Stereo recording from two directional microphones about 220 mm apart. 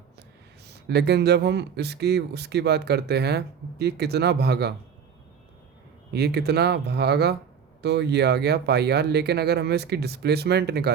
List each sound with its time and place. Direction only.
0.7 s speech: 50° right (ahead or behind)
6.1 s speech: 50° right (ahead or behind)